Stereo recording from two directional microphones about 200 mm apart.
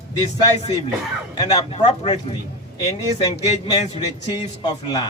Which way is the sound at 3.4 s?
30° left (ahead or behind).